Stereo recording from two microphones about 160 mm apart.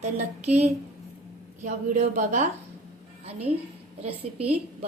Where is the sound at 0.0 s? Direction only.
45° right (ahead or behind).